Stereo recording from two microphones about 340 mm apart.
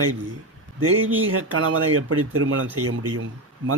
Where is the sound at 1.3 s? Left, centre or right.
Right.